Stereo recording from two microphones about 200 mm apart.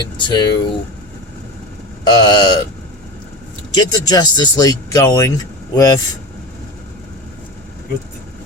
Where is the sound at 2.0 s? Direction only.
20° left (ahead or behind).